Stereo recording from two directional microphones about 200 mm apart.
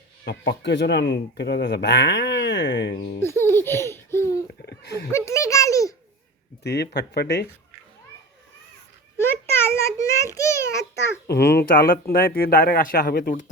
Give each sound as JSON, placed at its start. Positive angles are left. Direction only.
{"t": 0.3, "sound": "speech", "side_deg": 60}
{"t": 3.2, "sound": "baby laughter", "side_deg": 10}
{"t": 4.6, "sound": "a sound", "side_deg": 55}
{"t": 5.1, "sound": "a child's voice", "side_deg": 15}
{"t": 6.6, "sound": "speech", "side_deg": 55}
{"t": 9.1, "sound": "a sound", "side_deg": 10}
{"t": 11.3, "sound": "speech", "side_deg": 55}